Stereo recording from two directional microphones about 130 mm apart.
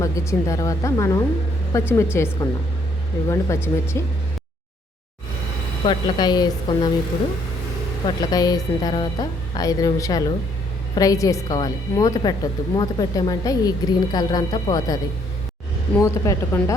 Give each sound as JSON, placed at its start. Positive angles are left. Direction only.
{"t": 0.0, "sound": "a woman's voice", "side_deg": 25}
{"t": 5.8, "sound": "speech", "side_deg": 35}
{"t": 8.3, "sound": "a woman's voice", "side_deg": 30}
{"t": 16.0, "sound": "a woman's voice", "side_deg": 25}